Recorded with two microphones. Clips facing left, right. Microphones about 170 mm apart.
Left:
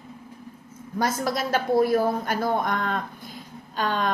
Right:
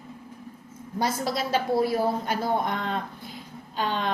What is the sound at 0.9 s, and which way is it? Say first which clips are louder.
A woman's voice: left 2 dB; 50° left (ahead or behind).